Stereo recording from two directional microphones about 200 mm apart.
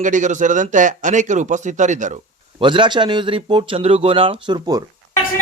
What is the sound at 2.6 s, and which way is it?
A man's voice, 25° right (ahead or behind).